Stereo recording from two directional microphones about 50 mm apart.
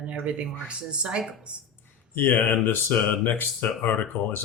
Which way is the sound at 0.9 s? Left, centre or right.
Centre.